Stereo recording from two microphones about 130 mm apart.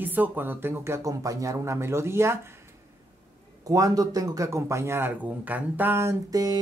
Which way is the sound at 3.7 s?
25° right (ahead or behind).